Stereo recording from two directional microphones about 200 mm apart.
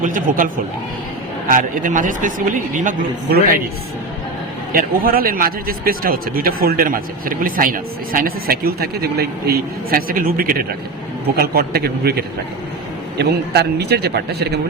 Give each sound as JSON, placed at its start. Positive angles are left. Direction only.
{"t": 0.0, "sound": "speech", "side_deg": -40}
{"t": 4.7, "sound": "speech", "side_deg": -45}